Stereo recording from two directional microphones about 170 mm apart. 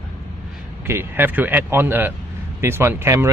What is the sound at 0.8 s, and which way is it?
Speech, 15° right (ahead or behind).